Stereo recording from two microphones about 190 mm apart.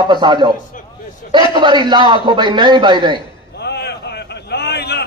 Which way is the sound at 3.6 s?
60° left (ahead or behind).